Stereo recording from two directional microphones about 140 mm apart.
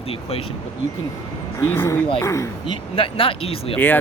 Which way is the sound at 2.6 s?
40° left (ahead or behind).